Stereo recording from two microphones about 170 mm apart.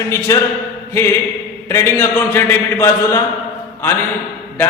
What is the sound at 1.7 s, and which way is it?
A man's voice, 15° left (ahead or behind).